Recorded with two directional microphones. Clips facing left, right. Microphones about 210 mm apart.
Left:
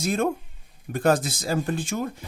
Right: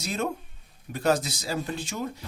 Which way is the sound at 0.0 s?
50° left (ahead or behind).